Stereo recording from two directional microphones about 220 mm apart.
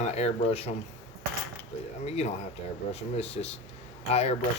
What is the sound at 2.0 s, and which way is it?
Speech, 30° left (ahead or behind).